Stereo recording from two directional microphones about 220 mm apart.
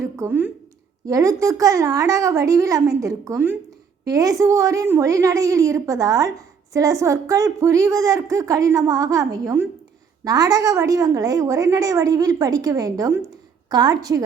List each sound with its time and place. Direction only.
0.0 s a woman's voice: 10° right (ahead or behind)